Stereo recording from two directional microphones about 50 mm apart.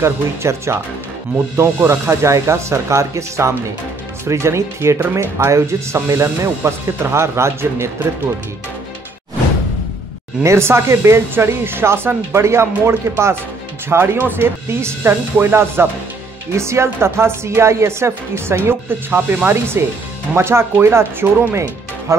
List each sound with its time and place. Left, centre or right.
0.0 s speech: right
7.0 s a woman's voice: right
10.4 s a woman's voice: right
13.8 s speech: right
16.5 s a woman's voice: right
19.4 s a woman's voice: right